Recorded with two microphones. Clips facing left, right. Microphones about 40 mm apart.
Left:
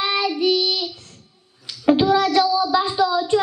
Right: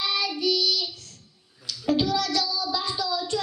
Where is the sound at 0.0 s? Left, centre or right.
Left.